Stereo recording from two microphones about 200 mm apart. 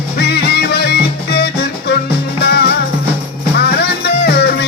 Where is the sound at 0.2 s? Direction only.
55° left (ahead or behind).